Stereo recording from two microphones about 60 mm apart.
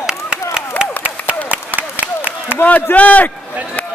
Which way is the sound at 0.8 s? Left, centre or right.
Right.